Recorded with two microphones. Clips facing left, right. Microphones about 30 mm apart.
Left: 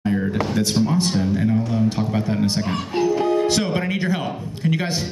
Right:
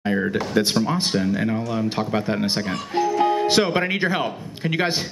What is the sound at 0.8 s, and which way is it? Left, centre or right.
A man's voice, right.